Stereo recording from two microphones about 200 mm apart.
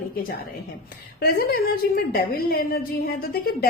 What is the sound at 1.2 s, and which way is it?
A woman's voice, 50° left (ahead or behind).